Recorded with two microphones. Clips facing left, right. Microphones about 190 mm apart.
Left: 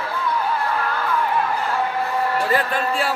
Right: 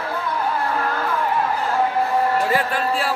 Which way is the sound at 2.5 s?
5° right (ahead or behind).